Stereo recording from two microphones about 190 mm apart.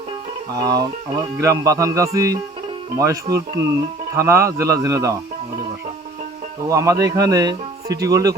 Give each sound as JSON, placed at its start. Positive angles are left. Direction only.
{"t": 0.6, "sound": "speech", "side_deg": -20}
{"t": 6.7, "sound": "speech", "side_deg": -15}